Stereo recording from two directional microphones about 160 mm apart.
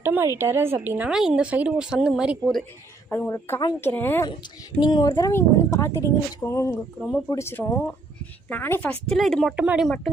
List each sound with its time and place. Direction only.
0.0 s speech: 15° right (ahead or behind)
3.1 s speech: 15° left (ahead or behind)
4.8 s speech: 30° left (ahead or behind); by 9.9 s 5° right (ahead or behind)